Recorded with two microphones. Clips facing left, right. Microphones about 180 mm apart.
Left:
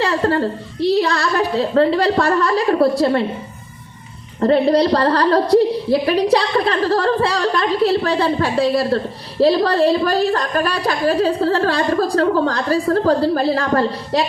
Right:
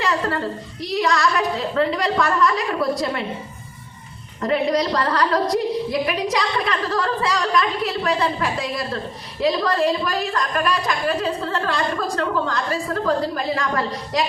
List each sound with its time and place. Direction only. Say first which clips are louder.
0.0 s a woman's voice: left 5 dB; 30° left (ahead or behind)
4.4 s a woman's voice: left 6 dB; 35° left (ahead or behind)